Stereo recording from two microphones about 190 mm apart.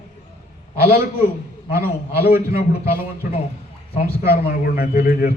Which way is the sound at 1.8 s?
55° left (ahead or behind).